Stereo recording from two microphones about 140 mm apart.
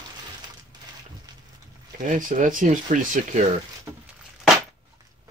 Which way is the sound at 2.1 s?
70° right (ahead or behind).